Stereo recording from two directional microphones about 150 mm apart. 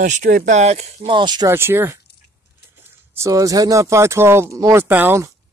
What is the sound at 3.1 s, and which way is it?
Speech, 20° right (ahead or behind).